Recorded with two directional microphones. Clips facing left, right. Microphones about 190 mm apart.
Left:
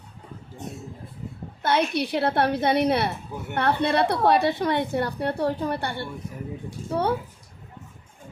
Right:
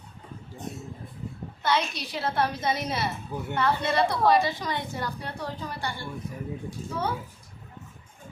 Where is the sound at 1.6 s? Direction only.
55° left (ahead or behind).